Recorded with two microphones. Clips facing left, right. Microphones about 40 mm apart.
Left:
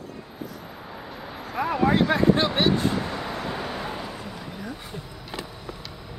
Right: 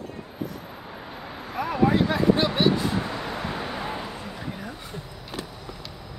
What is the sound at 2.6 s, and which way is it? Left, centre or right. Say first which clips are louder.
Speech: even; left.